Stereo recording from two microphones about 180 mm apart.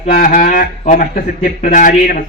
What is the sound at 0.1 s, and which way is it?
Speech, 50° left (ahead or behind).